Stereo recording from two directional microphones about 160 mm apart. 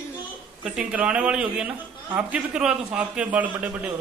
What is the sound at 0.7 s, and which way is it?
A man's voice, 5° right (ahead or behind).